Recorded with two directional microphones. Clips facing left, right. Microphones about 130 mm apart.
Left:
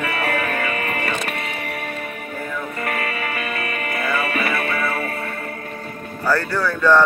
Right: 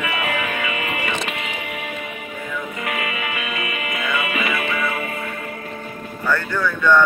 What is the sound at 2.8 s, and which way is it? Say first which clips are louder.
Music: left 1 dB; 40° left (ahead or behind).